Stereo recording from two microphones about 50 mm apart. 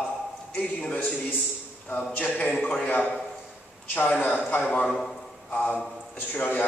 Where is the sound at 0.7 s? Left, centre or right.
Left.